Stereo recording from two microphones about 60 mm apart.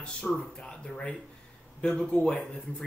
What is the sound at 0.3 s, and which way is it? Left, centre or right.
Speech, centre.